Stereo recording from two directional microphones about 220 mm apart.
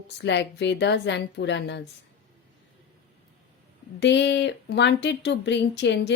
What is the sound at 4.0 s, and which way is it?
Speech, 50° left (ahead or behind).